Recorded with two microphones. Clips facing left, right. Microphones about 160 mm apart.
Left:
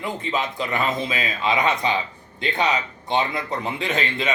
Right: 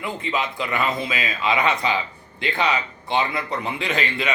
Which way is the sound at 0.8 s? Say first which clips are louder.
Even; 20° left (ahead or behind).